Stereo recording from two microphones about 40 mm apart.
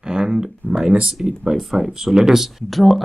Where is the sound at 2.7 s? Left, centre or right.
Centre.